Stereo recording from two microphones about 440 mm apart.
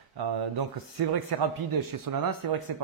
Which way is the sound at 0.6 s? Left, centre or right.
Right.